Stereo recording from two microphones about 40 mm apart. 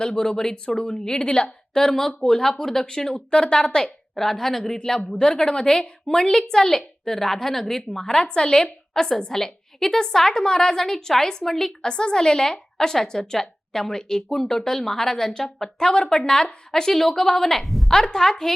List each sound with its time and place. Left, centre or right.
0.0 s a woman's voice: centre
4.1 s a woman's voice: centre
8.0 s a woman's voice: left; by 17.9 s centre
17.9 s a woman's voice: centre